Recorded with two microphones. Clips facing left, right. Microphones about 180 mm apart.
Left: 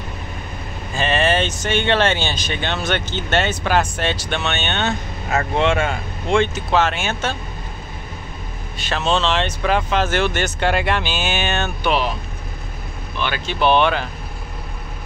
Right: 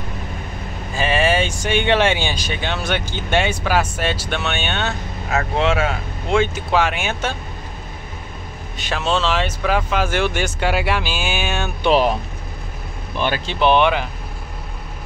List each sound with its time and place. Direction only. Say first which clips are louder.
0.9 s speech: even; 10° right (ahead or behind)
8.7 s speech: left 1 dB; 10° right (ahead or behind)
13.2 s speech: right 3 dB; 35° right (ahead or behind)
13.6 s speech: right 1 dB; 15° right (ahead or behind)